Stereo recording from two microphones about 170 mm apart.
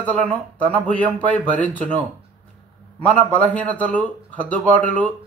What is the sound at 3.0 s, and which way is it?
A man's voice, 10° left (ahead or behind).